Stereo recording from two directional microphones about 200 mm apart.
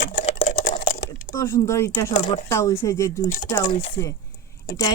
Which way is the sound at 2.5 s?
15° left (ahead or behind).